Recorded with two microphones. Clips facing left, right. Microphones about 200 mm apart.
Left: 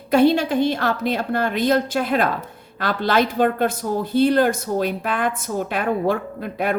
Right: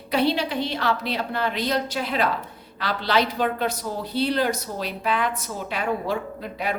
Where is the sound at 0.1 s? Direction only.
50° left (ahead or behind).